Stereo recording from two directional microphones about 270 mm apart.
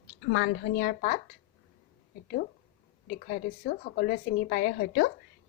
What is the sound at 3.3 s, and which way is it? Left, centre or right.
A woman's voice, left.